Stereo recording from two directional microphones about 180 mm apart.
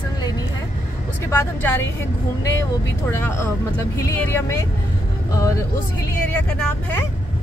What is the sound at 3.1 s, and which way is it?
Speech, 15° left (ahead or behind).